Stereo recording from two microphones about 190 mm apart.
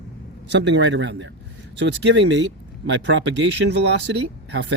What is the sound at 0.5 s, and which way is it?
Speech, 70° right (ahead or behind).